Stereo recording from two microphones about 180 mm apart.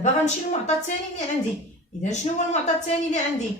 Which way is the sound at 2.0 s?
40° left (ahead or behind).